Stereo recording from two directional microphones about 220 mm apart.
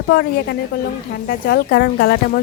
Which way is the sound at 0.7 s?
45° left (ahead or behind).